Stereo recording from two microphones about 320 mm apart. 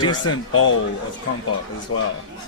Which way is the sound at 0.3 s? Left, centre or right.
Left.